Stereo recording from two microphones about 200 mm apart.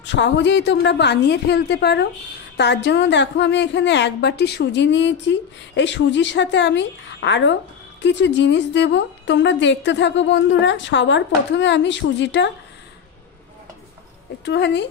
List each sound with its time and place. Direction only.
0.0 s a woman's voice: 60° left (ahead or behind)
14.4 s a woman's voice: 60° left (ahead or behind)